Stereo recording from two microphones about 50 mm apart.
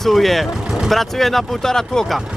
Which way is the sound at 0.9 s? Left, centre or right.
Centre.